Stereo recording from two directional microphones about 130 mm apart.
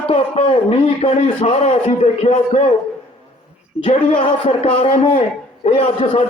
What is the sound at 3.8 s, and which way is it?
A man's voice, 45° left (ahead or behind).